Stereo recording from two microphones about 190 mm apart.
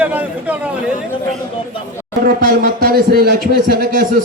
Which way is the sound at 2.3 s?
55° right (ahead or behind).